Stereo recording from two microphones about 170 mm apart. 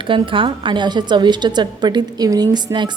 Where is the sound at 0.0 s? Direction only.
30° right (ahead or behind).